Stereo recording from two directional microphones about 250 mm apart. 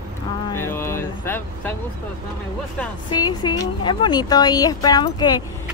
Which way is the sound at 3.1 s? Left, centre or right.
Centre.